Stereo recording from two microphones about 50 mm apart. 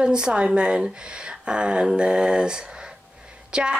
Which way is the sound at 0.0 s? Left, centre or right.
Centre.